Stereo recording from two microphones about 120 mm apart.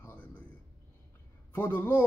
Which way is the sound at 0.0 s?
15° left (ahead or behind).